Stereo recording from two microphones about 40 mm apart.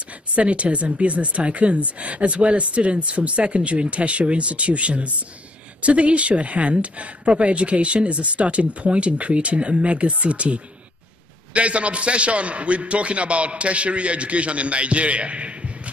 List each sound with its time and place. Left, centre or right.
0.4 s speech: right